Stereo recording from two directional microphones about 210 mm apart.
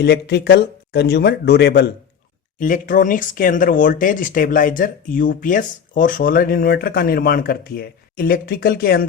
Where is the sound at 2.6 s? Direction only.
40° left (ahead or behind).